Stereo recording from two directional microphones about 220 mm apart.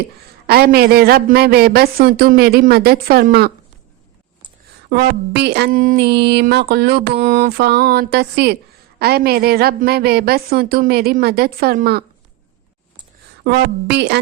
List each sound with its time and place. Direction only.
0.4 s a woman's voice: 45° right (ahead or behind)
4.9 s a woman's voice: 45° right (ahead or behind)
7.2 s a woman's voice: 40° right (ahead or behind)
13.4 s a woman's voice: 50° right (ahead or behind)